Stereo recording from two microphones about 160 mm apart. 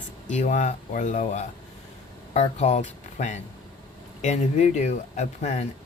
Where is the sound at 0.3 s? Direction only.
50° left (ahead or behind).